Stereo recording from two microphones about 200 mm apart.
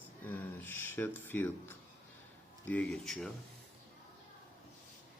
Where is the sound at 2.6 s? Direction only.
5° left (ahead or behind).